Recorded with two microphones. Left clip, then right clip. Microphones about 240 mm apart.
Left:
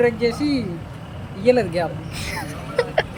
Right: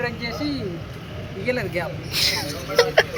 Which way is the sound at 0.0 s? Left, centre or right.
Left.